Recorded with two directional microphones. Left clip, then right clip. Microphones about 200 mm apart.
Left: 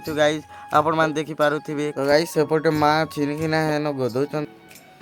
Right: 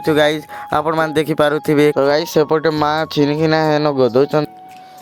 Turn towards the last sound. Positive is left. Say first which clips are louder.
# right 10 dB
turn(degrees=-25)  # may be behind; listen again after turning